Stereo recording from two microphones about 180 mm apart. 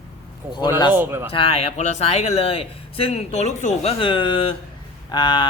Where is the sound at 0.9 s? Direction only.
10° right (ahead or behind).